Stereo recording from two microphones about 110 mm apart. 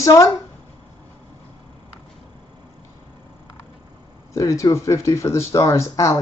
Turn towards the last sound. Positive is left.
turn(degrees=25)  # may be behind; listen again after turning